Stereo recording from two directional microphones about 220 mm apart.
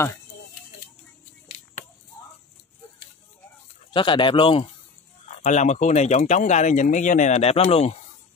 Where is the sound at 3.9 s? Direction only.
20° left (ahead or behind).